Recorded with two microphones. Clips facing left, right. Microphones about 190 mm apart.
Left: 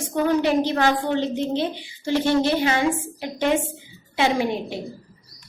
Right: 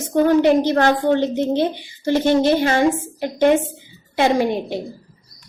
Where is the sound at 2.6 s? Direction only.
50° right (ahead or behind).